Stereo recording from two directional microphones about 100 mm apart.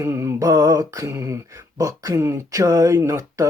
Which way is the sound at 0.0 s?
30° right (ahead or behind).